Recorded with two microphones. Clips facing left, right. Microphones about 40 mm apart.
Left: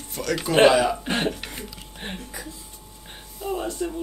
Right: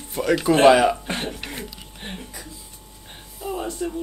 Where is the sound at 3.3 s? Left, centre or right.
Centre.